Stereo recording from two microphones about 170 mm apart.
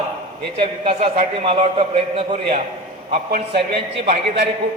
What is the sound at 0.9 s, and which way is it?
A man's voice, 35° right (ahead or behind).